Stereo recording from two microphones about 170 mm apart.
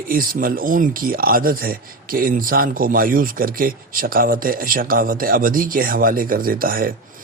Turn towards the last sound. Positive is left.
turn(degrees=-55)  # may be behind; listen again after turning